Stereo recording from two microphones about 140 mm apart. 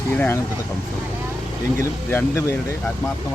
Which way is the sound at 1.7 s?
20° left (ahead or behind).